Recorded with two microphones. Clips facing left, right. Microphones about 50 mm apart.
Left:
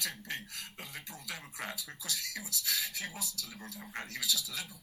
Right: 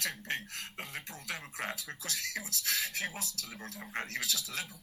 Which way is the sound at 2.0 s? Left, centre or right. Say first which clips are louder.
Right 2 dB; right.